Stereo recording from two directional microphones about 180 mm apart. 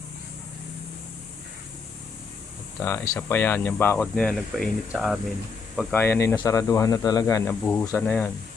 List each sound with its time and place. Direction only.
2.8 s speech: 15° left (ahead or behind); by 5.2 s 5° right (ahead or behind)
5.9 s speech: 10° left (ahead or behind)